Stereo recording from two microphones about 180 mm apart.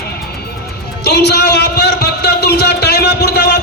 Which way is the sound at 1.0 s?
65° left (ahead or behind).